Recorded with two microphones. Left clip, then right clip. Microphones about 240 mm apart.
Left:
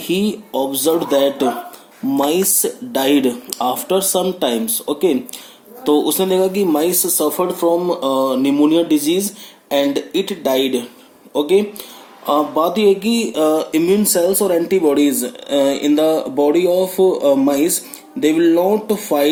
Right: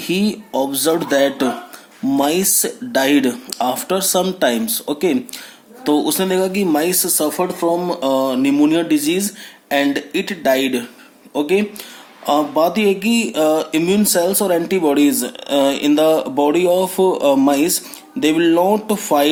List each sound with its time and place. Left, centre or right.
0.0 s speech: right